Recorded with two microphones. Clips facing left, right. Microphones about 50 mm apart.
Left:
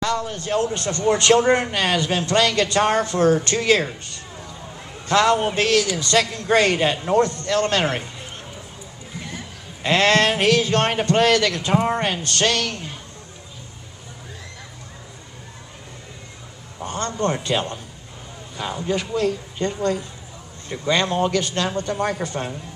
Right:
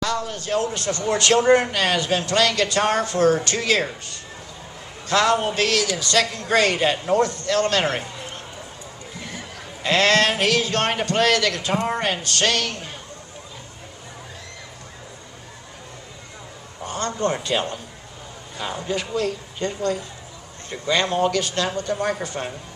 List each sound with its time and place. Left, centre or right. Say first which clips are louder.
0.0 s a sound: left 1 dB; left
0.7 s a man's voice: left 3 dB; left
5.0 s a man's voice: left 2 dB; left
9.8 s a man's voice: left 1 dB; left
16.8 s a man's voice: left 1 dB; left
18.9 s a man's voice: left 3 dB; left
21.1 s a man's voice: even; left